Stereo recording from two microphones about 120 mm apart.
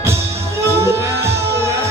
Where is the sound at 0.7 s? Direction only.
25° right (ahead or behind).